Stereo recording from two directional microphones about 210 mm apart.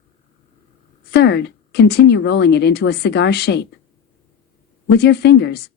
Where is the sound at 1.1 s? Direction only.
55° left (ahead or behind).